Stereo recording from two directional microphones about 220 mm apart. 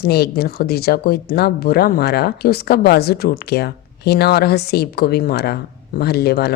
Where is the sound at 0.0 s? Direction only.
45° left (ahead or behind).